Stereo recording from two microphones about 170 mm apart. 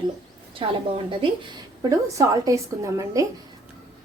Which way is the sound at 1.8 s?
20° right (ahead or behind).